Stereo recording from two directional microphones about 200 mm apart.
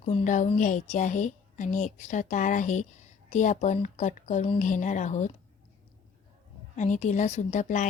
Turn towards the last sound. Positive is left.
turn(degrees=40)  # may be behind; listen again after turning